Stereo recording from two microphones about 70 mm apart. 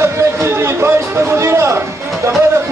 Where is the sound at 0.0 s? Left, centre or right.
Right.